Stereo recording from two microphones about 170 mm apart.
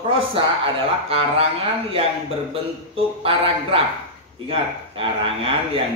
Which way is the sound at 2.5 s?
35° right (ahead or behind).